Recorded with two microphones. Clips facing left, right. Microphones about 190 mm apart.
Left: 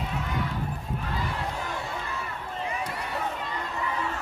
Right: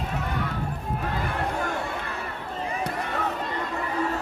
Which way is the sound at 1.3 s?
55° right (ahead or behind).